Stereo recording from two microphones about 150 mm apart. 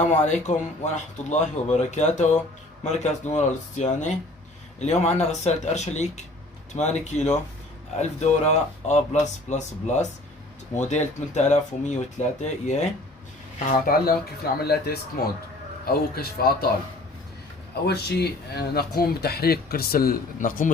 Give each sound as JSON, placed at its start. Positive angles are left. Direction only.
{"t": 0.0, "sound": "speech", "side_deg": 50}
{"t": 13.7, "sound": "speech", "side_deg": 70}
{"t": 17.8, "sound": "speech", "side_deg": 90}